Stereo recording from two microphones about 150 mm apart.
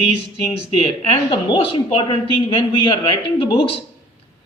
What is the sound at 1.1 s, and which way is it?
A woman's voice, 30° left (ahead or behind).